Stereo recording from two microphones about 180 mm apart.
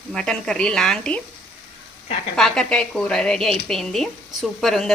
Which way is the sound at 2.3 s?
5° left (ahead or behind).